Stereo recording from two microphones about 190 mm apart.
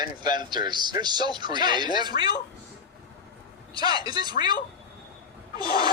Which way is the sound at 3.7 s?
20° right (ahead or behind).